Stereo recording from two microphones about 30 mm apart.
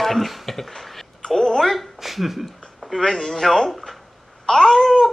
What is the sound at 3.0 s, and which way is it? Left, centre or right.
Speech, centre.